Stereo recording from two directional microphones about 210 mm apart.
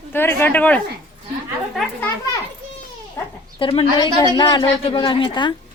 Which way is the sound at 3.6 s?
25° left (ahead or behind).